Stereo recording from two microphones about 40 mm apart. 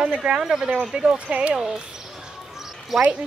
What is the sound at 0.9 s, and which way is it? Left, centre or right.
Speech, right.